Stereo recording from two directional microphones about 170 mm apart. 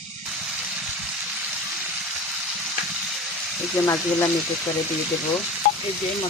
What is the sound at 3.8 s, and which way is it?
Speech, 20° left (ahead or behind).